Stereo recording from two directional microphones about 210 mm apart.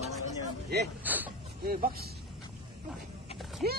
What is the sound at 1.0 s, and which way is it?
Speech, 10° right (ahead or behind).